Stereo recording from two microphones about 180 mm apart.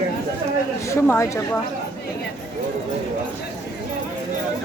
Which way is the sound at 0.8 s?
15° left (ahead or behind).